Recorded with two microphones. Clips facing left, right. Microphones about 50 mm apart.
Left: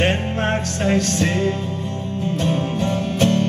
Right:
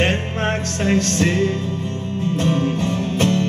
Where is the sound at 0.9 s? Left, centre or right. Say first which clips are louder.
Right 3 dB; right.